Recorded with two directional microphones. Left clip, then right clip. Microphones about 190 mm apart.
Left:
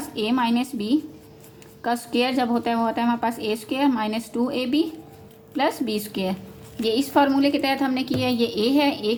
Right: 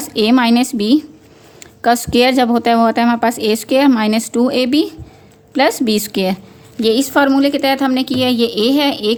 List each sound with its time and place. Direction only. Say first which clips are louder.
0.1 s a woman's voice: right 10 dB; 60° right (ahead or behind)
6.8 s a woman's voice: right 7 dB; 45° right (ahead or behind)